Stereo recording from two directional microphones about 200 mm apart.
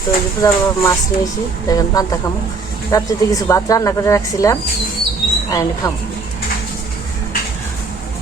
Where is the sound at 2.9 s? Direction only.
15° left (ahead or behind).